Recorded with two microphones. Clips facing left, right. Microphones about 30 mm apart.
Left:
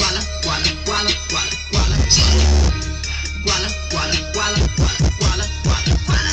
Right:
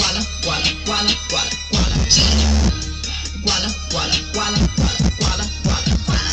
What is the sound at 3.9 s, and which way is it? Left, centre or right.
Music, centre.